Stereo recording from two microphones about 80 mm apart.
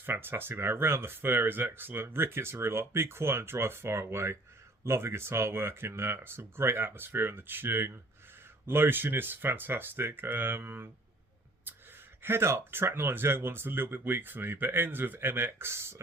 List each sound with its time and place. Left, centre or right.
0.0 s speech: right
12.2 s speech: right